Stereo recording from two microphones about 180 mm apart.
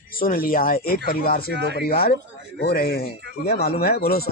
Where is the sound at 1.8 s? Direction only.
60° left (ahead or behind).